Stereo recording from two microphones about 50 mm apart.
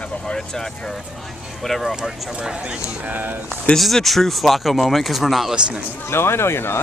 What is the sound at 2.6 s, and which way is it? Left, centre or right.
Speech, centre.